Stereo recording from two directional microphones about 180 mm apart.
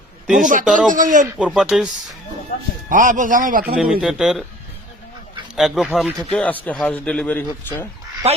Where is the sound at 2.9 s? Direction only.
45° right (ahead or behind).